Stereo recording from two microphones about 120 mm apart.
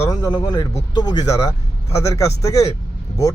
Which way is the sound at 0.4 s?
35° left (ahead or behind).